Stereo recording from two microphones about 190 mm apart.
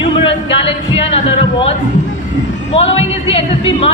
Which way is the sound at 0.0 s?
25° left (ahead or behind).